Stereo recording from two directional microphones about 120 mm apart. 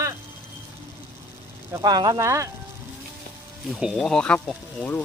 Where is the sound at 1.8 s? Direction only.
35° right (ahead or behind).